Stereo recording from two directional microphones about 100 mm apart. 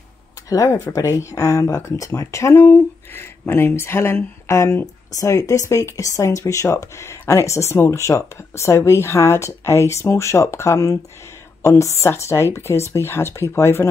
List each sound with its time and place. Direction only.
0.5 s speech: 35° left (ahead or behind)